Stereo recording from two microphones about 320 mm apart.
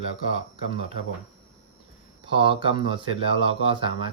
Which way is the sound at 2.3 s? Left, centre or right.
Centre.